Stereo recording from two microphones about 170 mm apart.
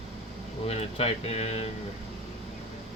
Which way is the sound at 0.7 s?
35° left (ahead or behind).